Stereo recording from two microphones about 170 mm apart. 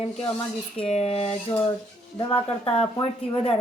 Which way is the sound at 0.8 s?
35° left (ahead or behind).